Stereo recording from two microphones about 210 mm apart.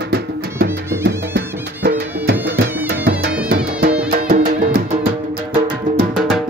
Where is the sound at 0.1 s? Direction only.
50° right (ahead or behind).